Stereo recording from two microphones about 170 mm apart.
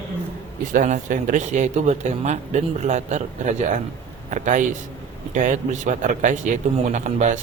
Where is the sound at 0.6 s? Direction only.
50° right (ahead or behind).